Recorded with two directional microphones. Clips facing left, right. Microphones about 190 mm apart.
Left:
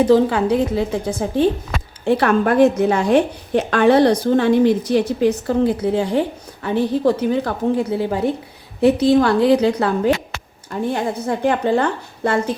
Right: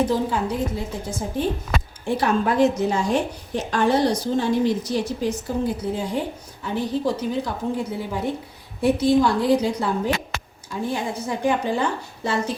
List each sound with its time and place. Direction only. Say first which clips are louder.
0.0 s a woman's voice: left 8 dB; 80° left
10.7 s a woman's voice: left 5 dB; 60° left (ahead or behind)